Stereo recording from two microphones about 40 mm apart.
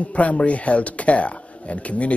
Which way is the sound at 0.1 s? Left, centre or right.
Left.